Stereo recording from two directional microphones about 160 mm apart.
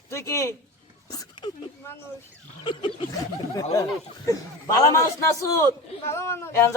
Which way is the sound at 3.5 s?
20° left (ahead or behind).